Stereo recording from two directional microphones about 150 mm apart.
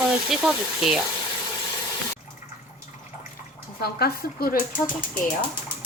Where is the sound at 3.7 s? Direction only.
90° left.